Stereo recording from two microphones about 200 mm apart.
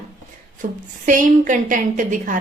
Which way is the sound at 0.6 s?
40° right (ahead or behind).